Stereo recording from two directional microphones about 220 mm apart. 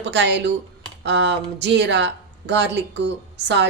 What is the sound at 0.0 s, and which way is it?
A woman's voice, 55° right (ahead or behind).